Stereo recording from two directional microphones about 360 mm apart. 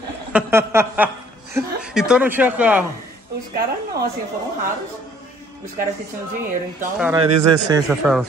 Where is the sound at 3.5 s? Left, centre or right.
Right.